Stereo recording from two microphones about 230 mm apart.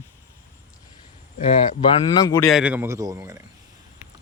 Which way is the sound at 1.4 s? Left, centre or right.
Left.